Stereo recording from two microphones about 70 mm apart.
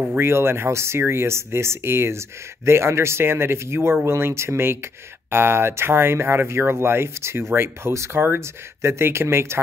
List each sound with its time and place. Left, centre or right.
0.2 s speech: right